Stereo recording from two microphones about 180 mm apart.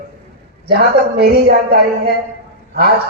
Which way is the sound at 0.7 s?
60° right (ahead or behind).